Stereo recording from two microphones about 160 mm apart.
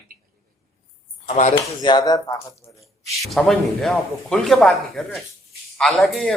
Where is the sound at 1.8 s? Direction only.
25° left (ahead or behind).